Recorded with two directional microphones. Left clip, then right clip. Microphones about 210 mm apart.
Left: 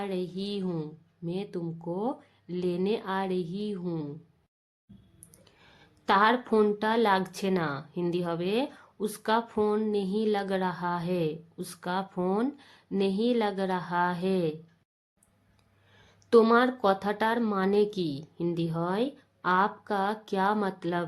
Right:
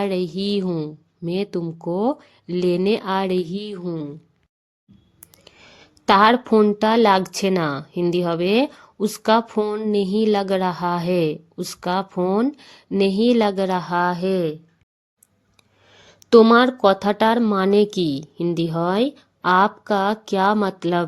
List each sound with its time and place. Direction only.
0.0 s speech: 40° right (ahead or behind)
3.8 s a woman's voice: 15° right (ahead or behind)
5.5 s speech: 35° right (ahead or behind)
15.9 s speech: 35° right (ahead or behind)